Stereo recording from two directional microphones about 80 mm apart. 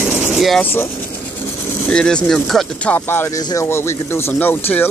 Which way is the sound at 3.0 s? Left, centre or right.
Left.